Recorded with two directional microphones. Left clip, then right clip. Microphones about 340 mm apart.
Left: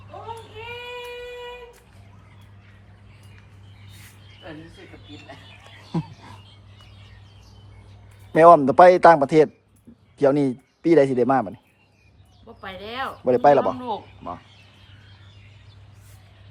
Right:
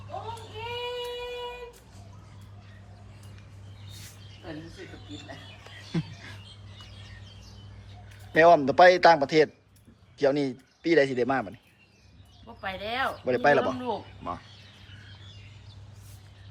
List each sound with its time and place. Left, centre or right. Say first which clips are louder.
5.9 s a sound: left 4 dB; centre
8.3 s a man's voice: left 6 dB; left
13.0 s speech: left 7 dB; centre